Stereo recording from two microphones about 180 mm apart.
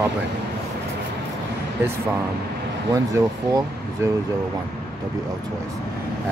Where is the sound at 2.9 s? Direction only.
20° right (ahead or behind).